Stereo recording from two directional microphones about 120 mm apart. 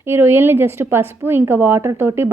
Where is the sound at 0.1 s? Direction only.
20° right (ahead or behind).